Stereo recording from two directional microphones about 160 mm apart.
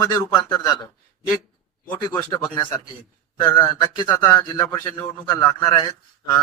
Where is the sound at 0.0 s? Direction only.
25° left (ahead or behind).